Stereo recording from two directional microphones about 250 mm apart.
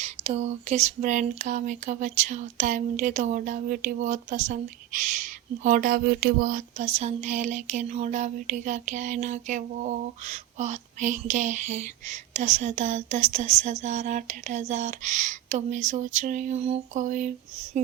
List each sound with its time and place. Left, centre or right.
0.0 s speech: right